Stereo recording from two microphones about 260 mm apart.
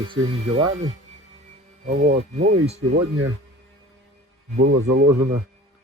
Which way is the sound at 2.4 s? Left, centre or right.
Right.